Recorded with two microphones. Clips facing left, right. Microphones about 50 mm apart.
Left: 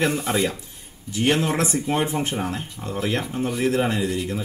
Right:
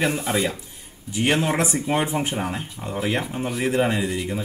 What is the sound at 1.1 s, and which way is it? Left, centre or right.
Speech, centre.